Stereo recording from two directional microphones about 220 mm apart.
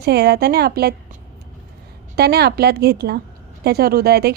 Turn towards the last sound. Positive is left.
turn(degrees=-45)  # may be behind; listen again after turning